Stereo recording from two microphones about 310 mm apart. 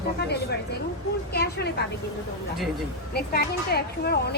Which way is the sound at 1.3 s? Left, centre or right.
Left.